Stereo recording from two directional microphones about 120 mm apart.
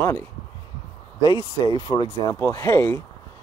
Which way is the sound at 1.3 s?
40° left (ahead or behind).